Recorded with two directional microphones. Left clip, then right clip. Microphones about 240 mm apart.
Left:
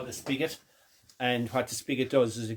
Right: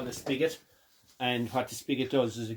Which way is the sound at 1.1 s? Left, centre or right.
Centre.